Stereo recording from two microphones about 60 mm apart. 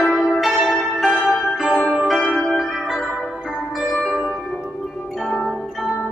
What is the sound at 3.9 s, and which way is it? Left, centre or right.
Music, centre.